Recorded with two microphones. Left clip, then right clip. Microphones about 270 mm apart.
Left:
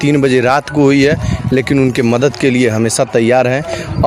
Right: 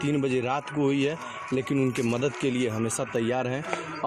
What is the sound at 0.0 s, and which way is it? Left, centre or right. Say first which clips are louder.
Speech: left 15 dB; left.